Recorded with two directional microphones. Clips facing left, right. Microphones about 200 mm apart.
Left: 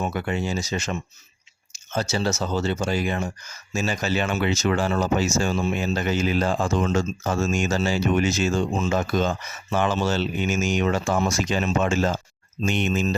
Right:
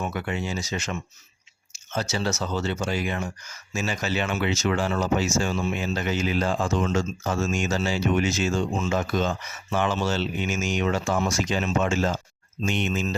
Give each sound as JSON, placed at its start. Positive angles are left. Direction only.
{"t": 0.0, "sound": "speech", "side_deg": 35}